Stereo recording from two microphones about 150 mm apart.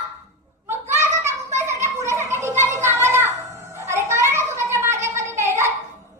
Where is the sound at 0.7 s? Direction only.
15° right (ahead or behind).